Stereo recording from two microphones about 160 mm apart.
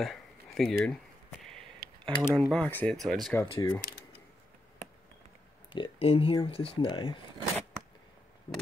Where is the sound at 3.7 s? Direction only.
80° left.